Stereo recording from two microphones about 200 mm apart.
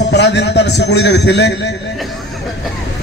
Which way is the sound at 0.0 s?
60° left (ahead or behind).